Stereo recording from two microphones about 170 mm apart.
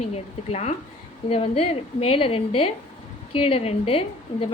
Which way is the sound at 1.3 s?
35° left (ahead or behind).